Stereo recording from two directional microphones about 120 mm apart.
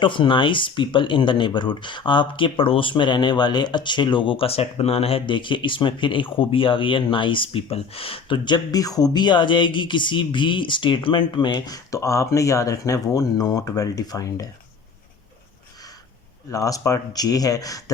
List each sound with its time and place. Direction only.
0.0 s speech: 45° left (ahead or behind)
16.5 s speech: 30° left (ahead or behind)